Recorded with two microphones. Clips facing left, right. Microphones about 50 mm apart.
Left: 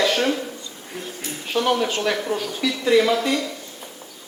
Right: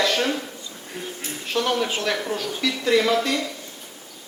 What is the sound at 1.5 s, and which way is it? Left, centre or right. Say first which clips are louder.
A woman's voice: left 2 dB; centre.